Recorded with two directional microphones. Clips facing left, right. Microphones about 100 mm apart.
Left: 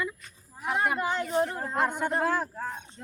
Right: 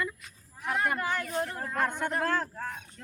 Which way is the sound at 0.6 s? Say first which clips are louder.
Left 2 dB; 20° left (ahead or behind).